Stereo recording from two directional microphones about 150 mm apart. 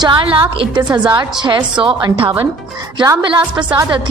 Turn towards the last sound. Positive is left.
turn(degrees=-30)  # may be behind; listen again after turning